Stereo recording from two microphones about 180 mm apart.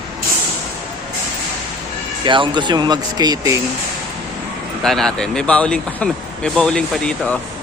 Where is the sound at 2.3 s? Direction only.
25° right (ahead or behind).